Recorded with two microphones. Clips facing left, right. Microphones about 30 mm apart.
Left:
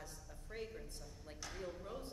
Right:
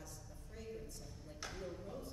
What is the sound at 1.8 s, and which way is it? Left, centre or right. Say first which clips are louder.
Speech: left 1 dB; left.